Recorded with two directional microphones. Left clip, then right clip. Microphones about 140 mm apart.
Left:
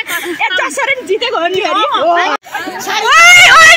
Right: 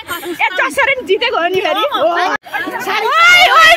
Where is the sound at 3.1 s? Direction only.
5° right (ahead or behind).